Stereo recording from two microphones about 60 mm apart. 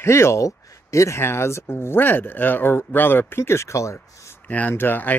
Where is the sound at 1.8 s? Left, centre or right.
Left.